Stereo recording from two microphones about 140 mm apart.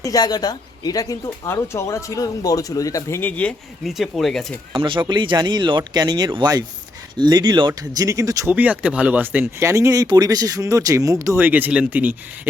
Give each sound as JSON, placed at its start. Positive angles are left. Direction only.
{"t": 0.0, "sound": "speech", "side_deg": 25}
{"t": 3.8, "sound": "speech", "side_deg": 0}
{"t": 4.7, "sound": "speech", "side_deg": -35}
{"t": 8.5, "sound": "speech", "side_deg": -10}